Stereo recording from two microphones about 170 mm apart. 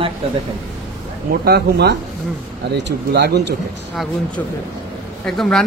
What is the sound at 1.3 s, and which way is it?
Speech, 65° right (ahead or behind).